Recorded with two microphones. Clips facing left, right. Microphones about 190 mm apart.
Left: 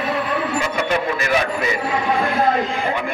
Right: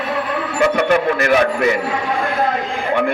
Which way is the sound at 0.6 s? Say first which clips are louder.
Right 6 dB; 65° right (ahead or behind).